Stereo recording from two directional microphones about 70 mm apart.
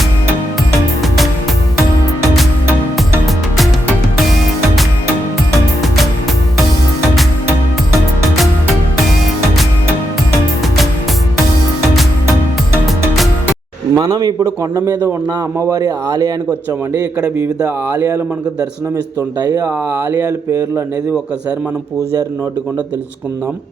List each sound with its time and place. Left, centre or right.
13.9 s a man's voice: right
14.3 s speech: right
16.5 s a man's voice: right
19.4 s speech: right
19.6 s speech: right